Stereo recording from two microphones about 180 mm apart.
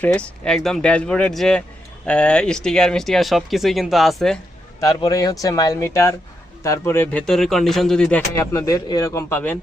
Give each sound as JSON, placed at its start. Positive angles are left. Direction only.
{"t": 0.0, "sound": "speech", "side_deg": 5}
{"t": 4.8, "sound": "a man's voice", "side_deg": 20}